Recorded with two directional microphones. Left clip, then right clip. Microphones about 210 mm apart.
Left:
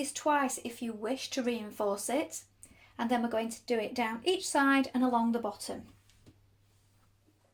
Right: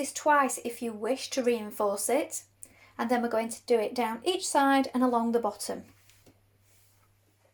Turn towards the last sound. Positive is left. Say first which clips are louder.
# right 5 dB
turn(degrees=-30)  # may be behind; listen again after turning